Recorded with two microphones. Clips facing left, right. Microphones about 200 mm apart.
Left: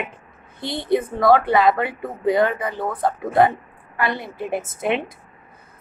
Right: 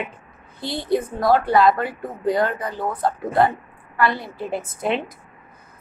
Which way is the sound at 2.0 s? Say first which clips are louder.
Left 2 dB; 25° left (ahead or behind).